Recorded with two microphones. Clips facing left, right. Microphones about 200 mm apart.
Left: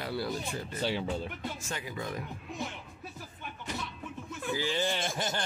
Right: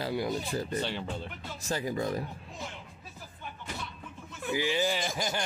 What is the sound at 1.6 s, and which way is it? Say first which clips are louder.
Speech: right 7 dB; 35° right (ahead or behind).